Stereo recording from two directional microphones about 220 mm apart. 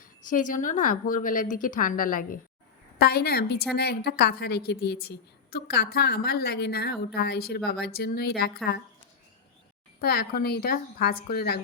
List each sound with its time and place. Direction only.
0.3 s a woman's voice: 35° left (ahead or behind)
10.0 s a woman's voice: 45° left (ahead or behind)